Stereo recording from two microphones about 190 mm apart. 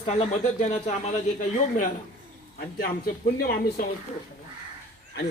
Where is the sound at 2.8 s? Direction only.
50° left (ahead or behind).